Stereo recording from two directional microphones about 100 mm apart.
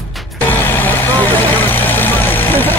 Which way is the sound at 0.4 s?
20° left (ahead or behind).